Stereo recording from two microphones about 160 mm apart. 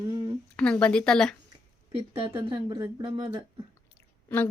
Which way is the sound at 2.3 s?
25° right (ahead or behind).